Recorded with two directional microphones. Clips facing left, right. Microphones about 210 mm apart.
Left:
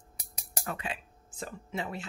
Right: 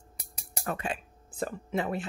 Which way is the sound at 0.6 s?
45° right (ahead or behind).